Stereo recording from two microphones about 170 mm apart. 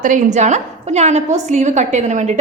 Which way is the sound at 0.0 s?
45° right (ahead or behind).